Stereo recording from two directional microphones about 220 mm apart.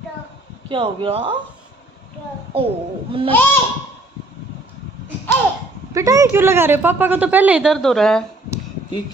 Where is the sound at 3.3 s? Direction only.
10° left (ahead or behind).